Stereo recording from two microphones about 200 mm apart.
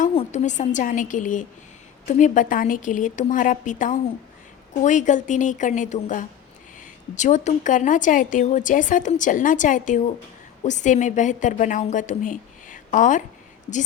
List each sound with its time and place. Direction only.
0.0 s a woman's voice: 30° left (ahead or behind)